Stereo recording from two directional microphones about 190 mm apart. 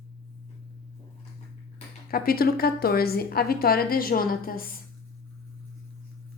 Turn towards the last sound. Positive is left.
turn(degrees=50)  # may be behind; listen again after turning